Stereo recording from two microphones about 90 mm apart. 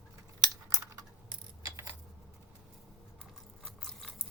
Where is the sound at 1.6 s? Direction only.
35° right (ahead or behind).